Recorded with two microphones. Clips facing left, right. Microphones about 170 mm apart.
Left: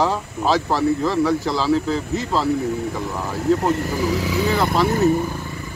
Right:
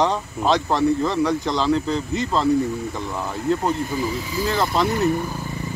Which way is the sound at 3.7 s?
80° left.